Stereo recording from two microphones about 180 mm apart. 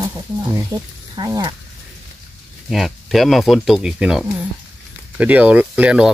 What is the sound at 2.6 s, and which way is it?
Speech, centre (ahead or behind).